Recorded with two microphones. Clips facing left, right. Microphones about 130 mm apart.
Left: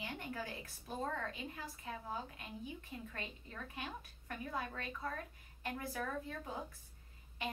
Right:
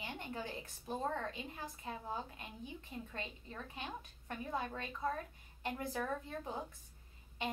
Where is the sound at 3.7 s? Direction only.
20° right (ahead or behind).